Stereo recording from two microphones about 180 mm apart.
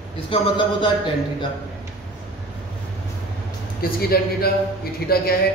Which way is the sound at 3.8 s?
55° left (ahead or behind).